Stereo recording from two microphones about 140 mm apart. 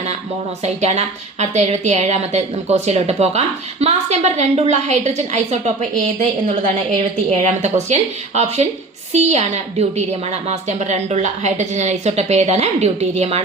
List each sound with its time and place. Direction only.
0.6 s a woman's voice: 50° right (ahead or behind)